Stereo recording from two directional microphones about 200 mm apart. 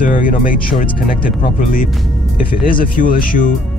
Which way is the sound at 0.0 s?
40° left (ahead or behind).